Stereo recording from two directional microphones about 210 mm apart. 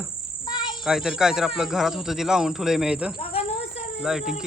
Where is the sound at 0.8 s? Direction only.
Centre (ahead or behind).